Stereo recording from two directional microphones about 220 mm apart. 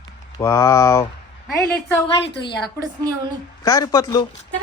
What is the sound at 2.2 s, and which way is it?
Speech, 50° left (ahead or behind).